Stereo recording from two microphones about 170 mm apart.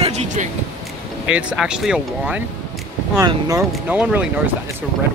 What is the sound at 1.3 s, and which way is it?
Speech, 5° right (ahead or behind).